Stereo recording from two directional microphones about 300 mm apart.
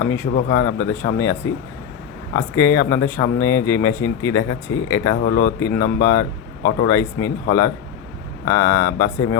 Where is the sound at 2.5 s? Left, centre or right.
Centre.